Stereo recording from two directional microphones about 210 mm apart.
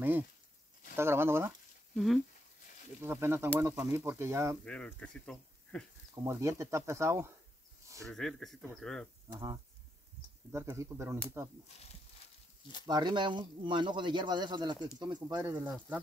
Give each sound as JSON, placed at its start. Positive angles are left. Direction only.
{"t": 0.9, "sound": "speech", "side_deg": -10}
{"t": 3.0, "sound": "speech", "side_deg": -10}
{"t": 4.6, "sound": "speech", "side_deg": 5}
{"t": 6.2, "sound": "speech", "side_deg": -15}
{"t": 8.1, "sound": "speech", "side_deg": 5}
{"t": 9.3, "sound": "speech", "side_deg": -15}
{"t": 12.8, "sound": "speech", "side_deg": -20}